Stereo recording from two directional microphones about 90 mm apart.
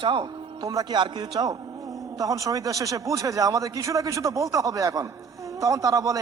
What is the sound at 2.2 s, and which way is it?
A man's voice, 40° right (ahead or behind).